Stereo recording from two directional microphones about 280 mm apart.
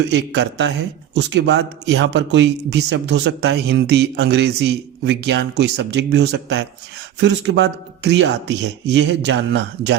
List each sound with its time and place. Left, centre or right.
0.1 s a man's voice: right